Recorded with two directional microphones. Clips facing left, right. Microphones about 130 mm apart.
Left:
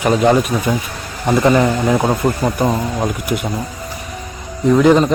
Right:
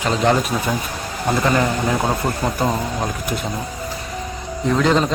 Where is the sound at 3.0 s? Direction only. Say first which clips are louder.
Left 4 dB; 5° left (ahead or behind).